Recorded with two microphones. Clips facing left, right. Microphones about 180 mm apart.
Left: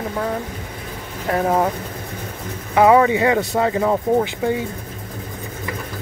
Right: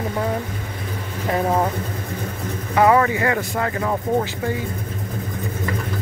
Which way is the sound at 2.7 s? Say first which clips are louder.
Left 3 dB; 15° left (ahead or behind).